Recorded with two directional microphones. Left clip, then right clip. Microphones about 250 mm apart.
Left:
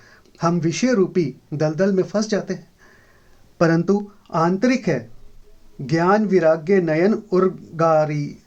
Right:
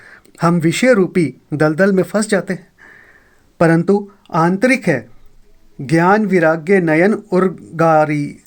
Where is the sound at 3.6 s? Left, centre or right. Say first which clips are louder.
Right 5 dB; centre.